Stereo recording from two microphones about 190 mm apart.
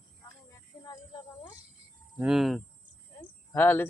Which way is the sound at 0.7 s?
20° left (ahead or behind).